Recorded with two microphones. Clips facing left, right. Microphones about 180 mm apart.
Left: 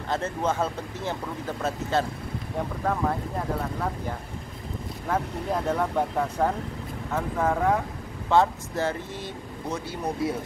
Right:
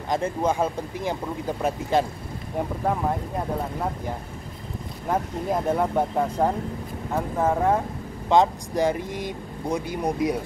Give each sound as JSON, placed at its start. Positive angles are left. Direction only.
{"t": 0.1, "sound": "speech", "side_deg": -10}
{"t": 5.0, "sound": "speech", "side_deg": -15}